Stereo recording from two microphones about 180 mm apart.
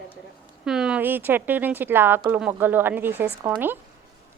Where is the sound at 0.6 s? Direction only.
5° right (ahead or behind).